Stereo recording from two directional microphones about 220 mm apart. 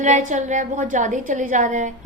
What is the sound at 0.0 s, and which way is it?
A woman's voice, 35° right (ahead or behind).